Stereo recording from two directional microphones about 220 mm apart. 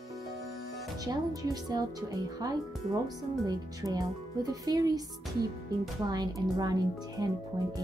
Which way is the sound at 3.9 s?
15° right (ahead or behind).